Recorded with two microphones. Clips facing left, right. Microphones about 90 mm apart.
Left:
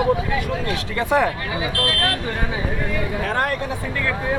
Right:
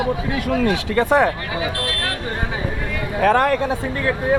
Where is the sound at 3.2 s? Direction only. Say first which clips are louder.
Right 10 dB; 90° right.